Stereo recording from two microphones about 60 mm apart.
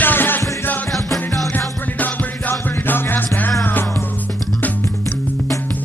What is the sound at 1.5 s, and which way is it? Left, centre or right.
Music, left.